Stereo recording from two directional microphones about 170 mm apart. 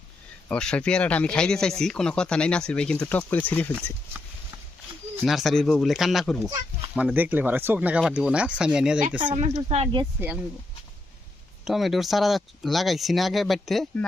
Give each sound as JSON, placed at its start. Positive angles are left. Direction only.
{"t": 0.4, "sound": "speech", "side_deg": 5}
{"t": 5.2, "sound": "speech", "side_deg": 0}
{"t": 6.9, "sound": "speech", "side_deg": -10}
{"t": 9.2, "sound": "speech", "side_deg": -35}
{"t": 11.6, "sound": "speech", "side_deg": 0}